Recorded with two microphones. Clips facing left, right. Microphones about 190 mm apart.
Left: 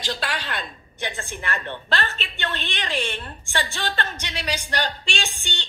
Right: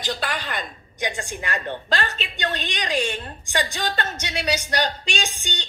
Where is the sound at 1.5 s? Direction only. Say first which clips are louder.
Right 1 dB; 40° right (ahead or behind).